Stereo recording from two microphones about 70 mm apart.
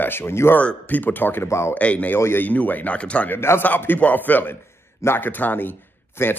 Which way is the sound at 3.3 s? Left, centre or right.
Left.